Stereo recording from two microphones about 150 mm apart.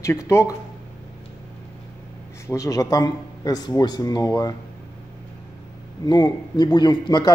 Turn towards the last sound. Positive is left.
turn(degrees=30)  # may be behind; listen again after turning